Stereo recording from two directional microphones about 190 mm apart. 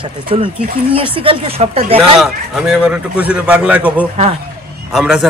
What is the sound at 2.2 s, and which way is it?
A man's voice, centre (ahead or behind).